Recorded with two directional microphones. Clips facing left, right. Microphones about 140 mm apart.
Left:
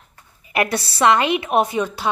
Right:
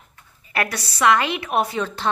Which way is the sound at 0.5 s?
20° left (ahead or behind).